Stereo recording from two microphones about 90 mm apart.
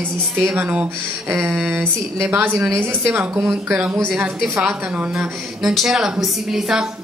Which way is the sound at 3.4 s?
10° right (ahead or behind).